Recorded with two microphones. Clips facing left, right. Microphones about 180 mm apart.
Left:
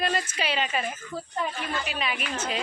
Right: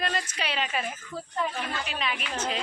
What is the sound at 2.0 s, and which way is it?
Speech, 5° left (ahead or behind).